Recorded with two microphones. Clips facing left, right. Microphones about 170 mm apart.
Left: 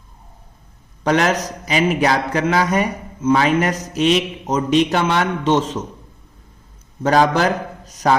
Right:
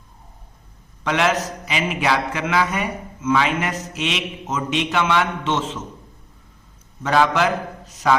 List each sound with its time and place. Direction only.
1.0 s a man's voice: 40° left (ahead or behind)
7.0 s a man's voice: 40° left (ahead or behind)